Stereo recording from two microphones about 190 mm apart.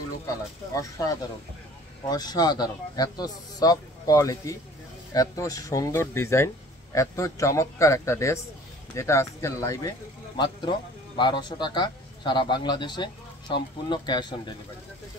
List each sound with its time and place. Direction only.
0.7 s speech: 20° left (ahead or behind)